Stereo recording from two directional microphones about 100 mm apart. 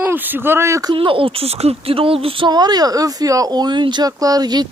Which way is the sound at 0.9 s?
65° right (ahead or behind).